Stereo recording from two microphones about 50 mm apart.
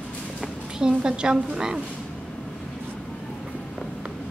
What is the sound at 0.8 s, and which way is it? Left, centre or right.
A woman's voice, centre.